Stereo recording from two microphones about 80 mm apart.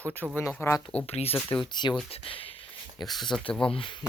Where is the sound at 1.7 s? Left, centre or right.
Left.